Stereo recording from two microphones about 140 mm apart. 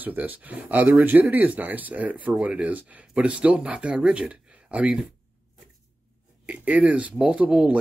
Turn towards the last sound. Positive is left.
turn(degrees=-10)  # may be behind; listen again after turning